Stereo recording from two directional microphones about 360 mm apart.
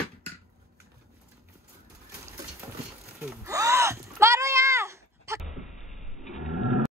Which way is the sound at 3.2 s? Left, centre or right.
Centre.